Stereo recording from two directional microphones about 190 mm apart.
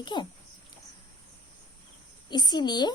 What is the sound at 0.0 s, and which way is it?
Speech, 25° left (ahead or behind).